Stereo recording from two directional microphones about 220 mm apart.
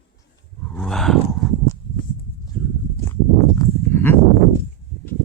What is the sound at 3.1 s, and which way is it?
Livestock, 15° left (ahead or behind).